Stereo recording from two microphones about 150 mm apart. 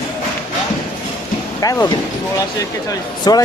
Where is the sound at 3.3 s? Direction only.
25° left (ahead or behind).